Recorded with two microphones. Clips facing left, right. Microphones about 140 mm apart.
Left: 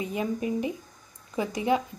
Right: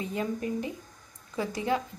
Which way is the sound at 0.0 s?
15° left (ahead or behind).